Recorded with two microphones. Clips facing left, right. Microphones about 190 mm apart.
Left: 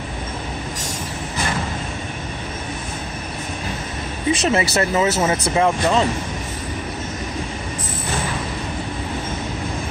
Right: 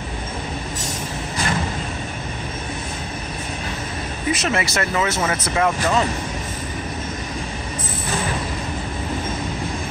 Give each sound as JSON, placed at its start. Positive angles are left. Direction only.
{"t": 4.3, "sound": "speech", "side_deg": 30}